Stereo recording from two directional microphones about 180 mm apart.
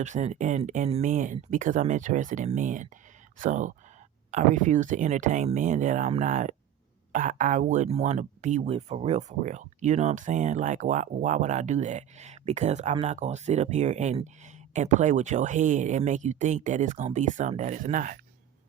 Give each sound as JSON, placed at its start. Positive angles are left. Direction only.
{"t": 0.0, "sound": "speech", "side_deg": -40}